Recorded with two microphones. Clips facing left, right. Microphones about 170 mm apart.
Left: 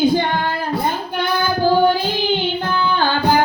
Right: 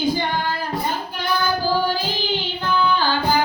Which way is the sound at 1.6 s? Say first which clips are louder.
Left 6 dB; 60° left (ahead or behind).